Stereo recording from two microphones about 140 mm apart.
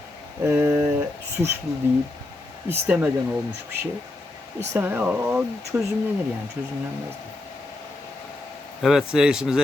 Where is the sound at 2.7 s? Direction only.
15° right (ahead or behind).